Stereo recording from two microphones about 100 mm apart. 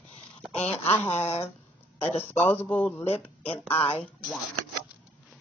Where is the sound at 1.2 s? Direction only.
80° left.